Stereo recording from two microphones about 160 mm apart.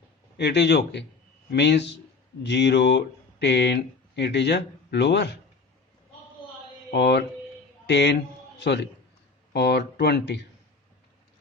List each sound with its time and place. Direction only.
0.3 s speech: 90° left
6.9 s a man's voice: 90° left